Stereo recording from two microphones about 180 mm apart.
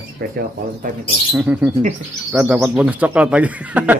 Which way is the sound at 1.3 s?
10° right (ahead or behind).